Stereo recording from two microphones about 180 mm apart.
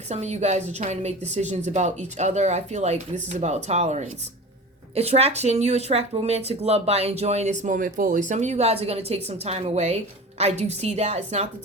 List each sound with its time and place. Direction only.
0.1 s speech: 40° right (ahead or behind)